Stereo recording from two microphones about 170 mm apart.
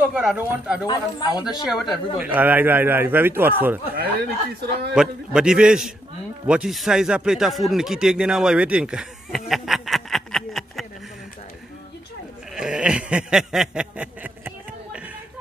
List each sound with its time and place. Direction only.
0.0 s a man's voice: 5° right (ahead or behind)
0.8 s speech: 25° left (ahead or behind)
1.4 s a man's voice: centre (ahead or behind)
3.9 s speech: 70° right (ahead or behind)
4.9 s a man's voice: 5° right (ahead or behind)
12.5 s a sound: 5° right (ahead or behind)